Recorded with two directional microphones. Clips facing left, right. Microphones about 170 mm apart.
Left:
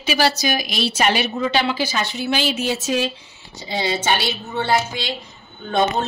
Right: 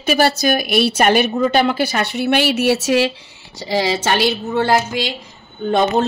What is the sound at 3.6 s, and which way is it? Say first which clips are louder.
A woman's voice: right 5 dB; 90° right.